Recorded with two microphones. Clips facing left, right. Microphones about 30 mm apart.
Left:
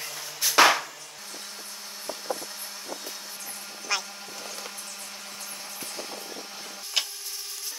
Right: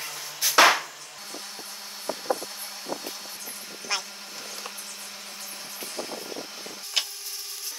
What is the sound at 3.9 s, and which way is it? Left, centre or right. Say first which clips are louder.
Speech: left 1 dB; centre.